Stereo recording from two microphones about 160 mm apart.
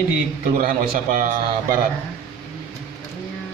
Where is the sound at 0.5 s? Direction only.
60° right (ahead or behind).